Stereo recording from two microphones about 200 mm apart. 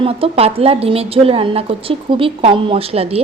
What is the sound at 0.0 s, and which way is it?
Speech, 30° right (ahead or behind).